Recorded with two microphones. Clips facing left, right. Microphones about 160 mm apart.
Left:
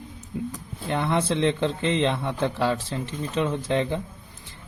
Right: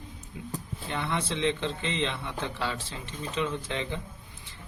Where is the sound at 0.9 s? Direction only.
50° left (ahead or behind).